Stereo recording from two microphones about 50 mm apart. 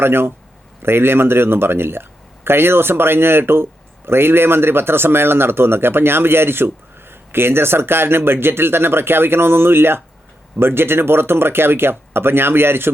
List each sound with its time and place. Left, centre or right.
0.0 s speech: right